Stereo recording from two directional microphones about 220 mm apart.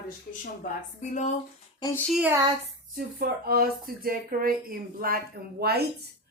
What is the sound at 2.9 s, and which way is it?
Speech, 45° right (ahead or behind).